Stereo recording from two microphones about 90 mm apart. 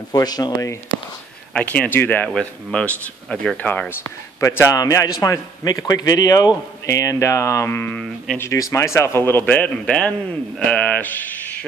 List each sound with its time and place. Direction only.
0.1 s speech: 45° left (ahead or behind)
1.5 s speech: 15° left (ahead or behind)
2.3 s speech: 10° left (ahead or behind)
4.4 s a man's voice: 35° left (ahead or behind)
8.4 s speech: 35° left (ahead or behind); by 11.6 s 20° left (ahead or behind)